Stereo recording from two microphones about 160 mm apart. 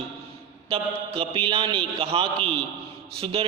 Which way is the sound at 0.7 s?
35° right (ahead or behind).